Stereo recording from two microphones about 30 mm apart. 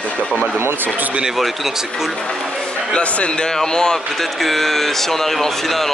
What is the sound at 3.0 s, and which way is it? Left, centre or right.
Speech, left.